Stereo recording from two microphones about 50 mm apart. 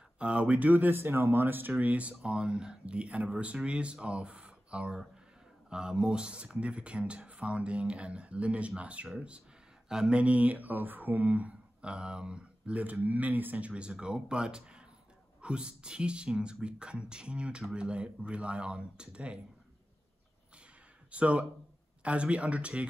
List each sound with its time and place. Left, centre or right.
0.2 s speech: right
21.1 s speech: right